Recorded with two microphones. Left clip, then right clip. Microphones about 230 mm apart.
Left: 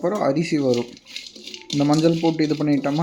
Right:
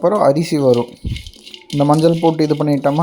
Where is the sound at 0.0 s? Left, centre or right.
Centre.